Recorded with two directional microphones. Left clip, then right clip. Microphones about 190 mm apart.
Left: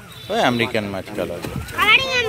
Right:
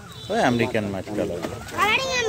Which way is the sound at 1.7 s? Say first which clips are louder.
Left 6 dB; 35° right (ahead or behind).